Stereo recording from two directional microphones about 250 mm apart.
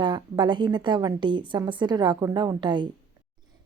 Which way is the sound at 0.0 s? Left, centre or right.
Centre.